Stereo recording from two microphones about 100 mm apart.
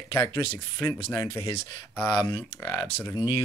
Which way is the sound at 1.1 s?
30° left (ahead or behind).